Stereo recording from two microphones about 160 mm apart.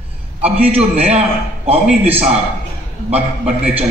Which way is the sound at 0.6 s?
40° right (ahead or behind).